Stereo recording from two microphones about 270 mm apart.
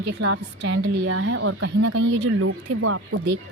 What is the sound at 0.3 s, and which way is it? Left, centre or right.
A woman's voice, right.